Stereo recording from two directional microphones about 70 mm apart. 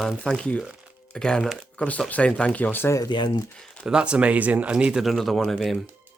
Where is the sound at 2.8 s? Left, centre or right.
Left.